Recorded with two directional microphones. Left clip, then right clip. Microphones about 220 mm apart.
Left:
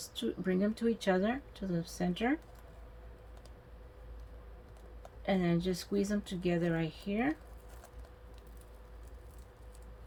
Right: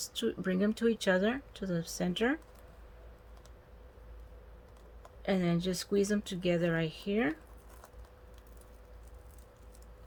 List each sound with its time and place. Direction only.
0.1 s speech: 45° right (ahead or behind)
5.2 s speech: 45° right (ahead or behind)